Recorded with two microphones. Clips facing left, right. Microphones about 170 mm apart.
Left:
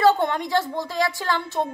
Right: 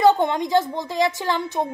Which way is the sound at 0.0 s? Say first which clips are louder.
Right 2 dB; 15° right (ahead or behind).